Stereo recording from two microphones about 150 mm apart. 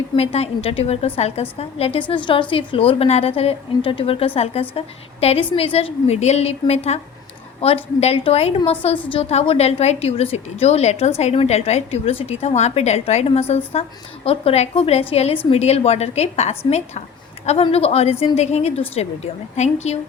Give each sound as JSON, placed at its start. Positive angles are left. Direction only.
{"t": 0.2, "sound": "a woman's voice", "side_deg": 45}